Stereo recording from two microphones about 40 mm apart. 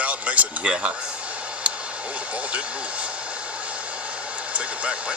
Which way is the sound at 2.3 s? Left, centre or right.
Right.